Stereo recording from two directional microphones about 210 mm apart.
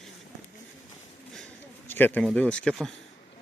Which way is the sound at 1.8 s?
10° left (ahead or behind).